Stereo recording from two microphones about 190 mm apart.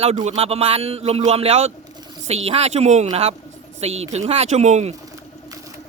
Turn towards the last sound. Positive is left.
turn(degrees=-35)  # may be behind; listen again after turning